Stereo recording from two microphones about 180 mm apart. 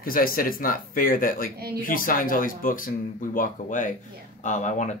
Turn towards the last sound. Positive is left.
turn(degrees=40)  # may be behind; listen again after turning